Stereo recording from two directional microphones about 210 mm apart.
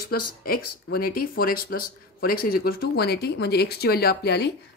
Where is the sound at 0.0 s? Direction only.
45° left (ahead or behind).